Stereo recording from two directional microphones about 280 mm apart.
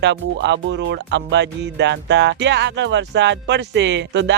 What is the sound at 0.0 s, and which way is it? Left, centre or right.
Speech, right.